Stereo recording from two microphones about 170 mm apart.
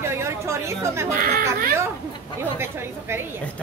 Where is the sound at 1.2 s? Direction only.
55° right (ahead or behind).